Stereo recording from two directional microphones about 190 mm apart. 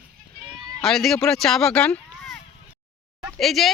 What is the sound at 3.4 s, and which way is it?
Speech, centre (ahead or behind).